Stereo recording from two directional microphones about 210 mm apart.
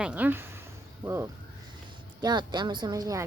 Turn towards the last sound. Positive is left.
turn(degrees=-15)  # may be behind; listen again after turning